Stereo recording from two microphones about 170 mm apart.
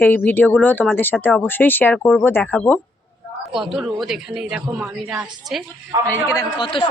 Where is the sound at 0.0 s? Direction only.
10° left (ahead or behind).